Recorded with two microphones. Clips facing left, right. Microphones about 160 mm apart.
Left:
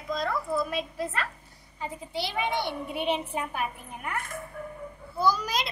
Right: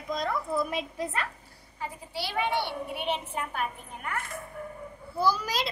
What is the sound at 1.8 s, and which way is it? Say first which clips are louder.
A child's voice: left 3 dB; 20° left (ahead or behind).